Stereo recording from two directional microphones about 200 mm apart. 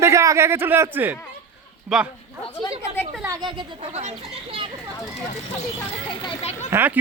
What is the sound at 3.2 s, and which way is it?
Speech, 25° right (ahead or behind).